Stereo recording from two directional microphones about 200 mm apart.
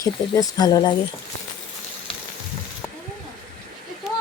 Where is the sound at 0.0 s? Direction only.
20° left (ahead or behind).